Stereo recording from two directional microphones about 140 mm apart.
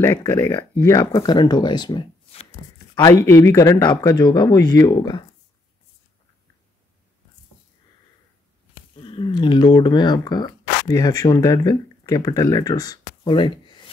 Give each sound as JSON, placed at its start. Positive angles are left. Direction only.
{"t": 0.7, "sound": "speech", "side_deg": 20}
{"t": 9.0, "sound": "speech", "side_deg": 35}